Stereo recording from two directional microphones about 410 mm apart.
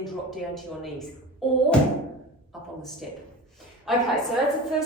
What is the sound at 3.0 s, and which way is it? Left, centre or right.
Speech, centre.